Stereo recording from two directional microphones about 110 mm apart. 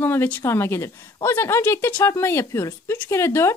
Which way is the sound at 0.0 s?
20° left (ahead or behind).